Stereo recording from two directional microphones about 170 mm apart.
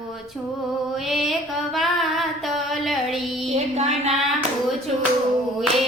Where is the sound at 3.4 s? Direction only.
40° right (ahead or behind).